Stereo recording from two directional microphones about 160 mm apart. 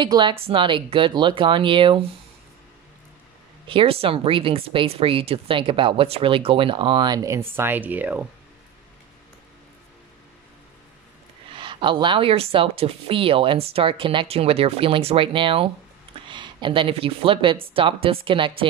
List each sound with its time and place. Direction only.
0.0 s speech: 30° right (ahead or behind)
3.6 s speech: 35° right (ahead or behind); by 8.3 s 10° right (ahead or behind)
11.5 s speech: 30° right (ahead or behind)